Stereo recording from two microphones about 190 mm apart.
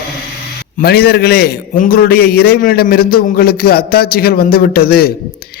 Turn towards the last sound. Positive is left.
turn(degrees=55)  # may be behind; listen again after turning